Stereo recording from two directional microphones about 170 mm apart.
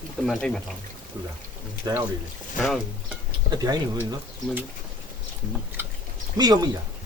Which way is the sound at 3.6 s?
20° right (ahead or behind).